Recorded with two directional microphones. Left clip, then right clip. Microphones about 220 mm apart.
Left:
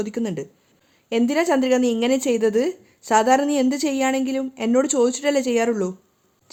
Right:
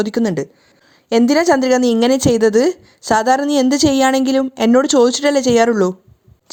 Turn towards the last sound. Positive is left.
turn(degrees=-25)  # may be behind; listen again after turning